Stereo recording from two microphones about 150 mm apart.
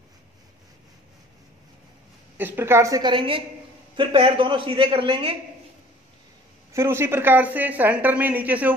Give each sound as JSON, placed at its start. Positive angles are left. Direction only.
{"t": 2.3, "sound": "a woman's voice", "side_deg": -15}
{"t": 6.7, "sound": "speech", "side_deg": -15}